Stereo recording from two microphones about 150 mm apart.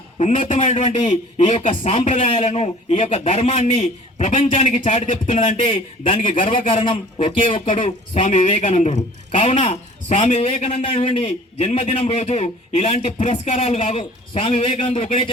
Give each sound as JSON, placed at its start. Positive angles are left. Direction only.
{"t": 0.2, "sound": "speech", "side_deg": 50}
{"t": 4.3, "sound": "a man's voice", "side_deg": 55}
{"t": 5.3, "sound": "a man's voice", "side_deg": 40}